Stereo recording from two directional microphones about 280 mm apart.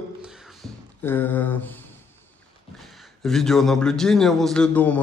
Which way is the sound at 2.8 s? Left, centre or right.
Centre.